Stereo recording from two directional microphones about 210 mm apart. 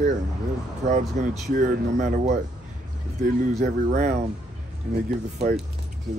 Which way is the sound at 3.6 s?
35° right (ahead or behind).